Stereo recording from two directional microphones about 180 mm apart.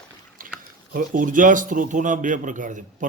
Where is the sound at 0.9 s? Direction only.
50° right (ahead or behind).